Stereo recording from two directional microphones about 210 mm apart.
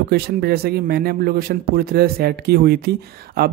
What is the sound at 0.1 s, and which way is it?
Speech, 50° right (ahead or behind).